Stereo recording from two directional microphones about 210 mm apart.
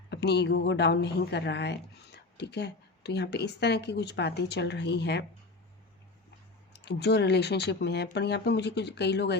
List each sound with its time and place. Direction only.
0.1 s a woman's voice: 55° left (ahead or behind)
6.7 s a woman's voice: 55° left (ahead or behind)